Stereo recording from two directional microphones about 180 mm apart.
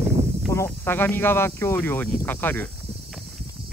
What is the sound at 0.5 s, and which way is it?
Speech, 15° left (ahead or behind).